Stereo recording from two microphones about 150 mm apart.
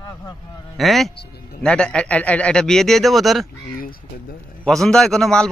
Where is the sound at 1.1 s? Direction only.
90° left.